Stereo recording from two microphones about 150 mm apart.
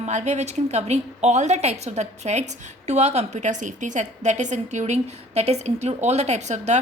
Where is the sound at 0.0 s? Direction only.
50° right (ahead or behind).